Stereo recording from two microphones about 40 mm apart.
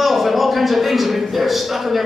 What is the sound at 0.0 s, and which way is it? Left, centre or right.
A man's voice, centre.